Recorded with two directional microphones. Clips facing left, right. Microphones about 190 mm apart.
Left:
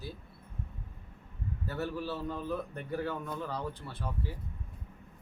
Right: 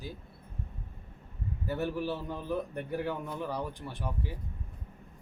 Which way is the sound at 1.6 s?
15° right (ahead or behind).